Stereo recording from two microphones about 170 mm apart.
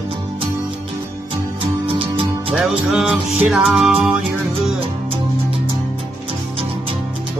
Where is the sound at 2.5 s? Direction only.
5° right (ahead or behind).